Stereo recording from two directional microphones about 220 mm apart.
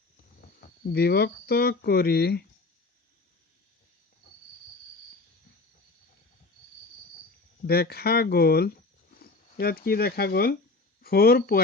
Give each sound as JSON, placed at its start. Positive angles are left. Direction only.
{"t": 0.4, "sound": "speech", "side_deg": 45}
{"t": 7.6, "sound": "speech", "side_deg": 45}